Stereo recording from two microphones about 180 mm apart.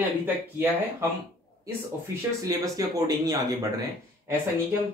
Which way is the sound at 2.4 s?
20° right (ahead or behind).